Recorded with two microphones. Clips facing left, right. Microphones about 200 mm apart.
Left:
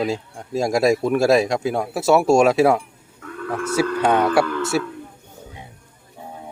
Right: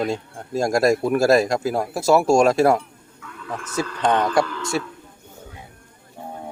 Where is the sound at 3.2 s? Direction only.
55° left (ahead or behind).